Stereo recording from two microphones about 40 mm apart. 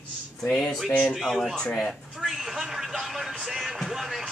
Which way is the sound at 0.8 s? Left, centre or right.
Left.